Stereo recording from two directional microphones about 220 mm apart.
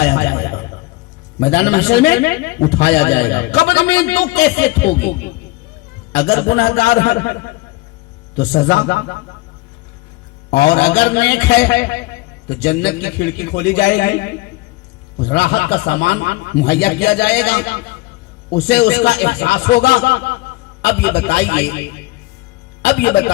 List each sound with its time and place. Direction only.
0.0 s a sound: 50° left (ahead or behind)
1.4 s a man's voice: 50° left (ahead or behind)
10.5 s a man's voice: 50° left (ahead or behind)